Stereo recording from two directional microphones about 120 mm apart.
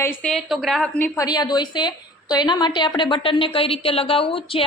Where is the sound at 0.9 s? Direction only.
15° left (ahead or behind).